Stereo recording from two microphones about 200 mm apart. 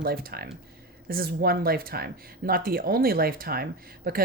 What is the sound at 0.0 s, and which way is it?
A woman's voice, 50° right (ahead or behind).